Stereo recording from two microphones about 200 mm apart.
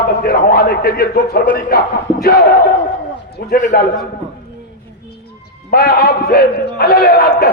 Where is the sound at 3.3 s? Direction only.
50° left (ahead or behind).